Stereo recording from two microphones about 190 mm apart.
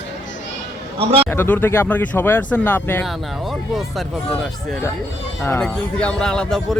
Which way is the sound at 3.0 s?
Centre (ahead or behind).